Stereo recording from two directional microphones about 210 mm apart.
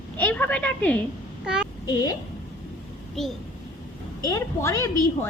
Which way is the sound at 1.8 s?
15° left (ahead or behind).